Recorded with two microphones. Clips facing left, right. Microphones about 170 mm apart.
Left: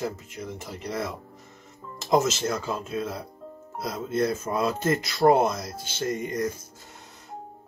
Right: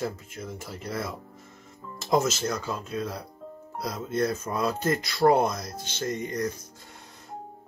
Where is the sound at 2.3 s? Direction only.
25° left (ahead or behind).